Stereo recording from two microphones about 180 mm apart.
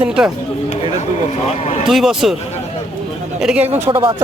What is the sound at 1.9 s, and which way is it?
Speech, centre (ahead or behind).